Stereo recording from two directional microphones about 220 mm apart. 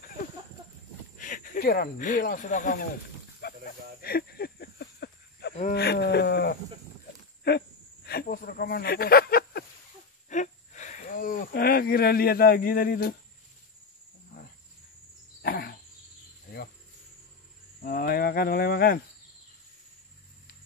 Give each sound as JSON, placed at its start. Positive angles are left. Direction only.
{"t": 1.1, "sound": "speech", "side_deg": 35}
{"t": 3.4, "sound": "livestock", "side_deg": 45}
{"t": 4.0, "sound": "a sound", "side_deg": 45}
{"t": 10.3, "sound": "speech", "side_deg": 35}
{"t": 15.4, "sound": "a sound", "side_deg": 45}
{"t": 17.8, "sound": "cricket", "side_deg": 40}